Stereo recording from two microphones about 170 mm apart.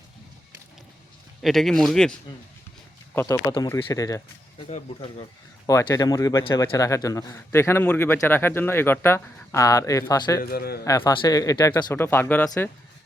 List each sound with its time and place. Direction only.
1.4 s speech: centre (ahead or behind)
3.2 s speech: 15° left (ahead or behind)
5.6 s speech: 20° left (ahead or behind)
10.4 s a man's voice: 65° left (ahead or behind)
10.8 s speech: 20° left (ahead or behind)